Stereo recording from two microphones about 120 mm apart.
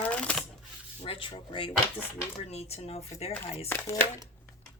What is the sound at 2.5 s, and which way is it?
Speech, 60° left (ahead or behind).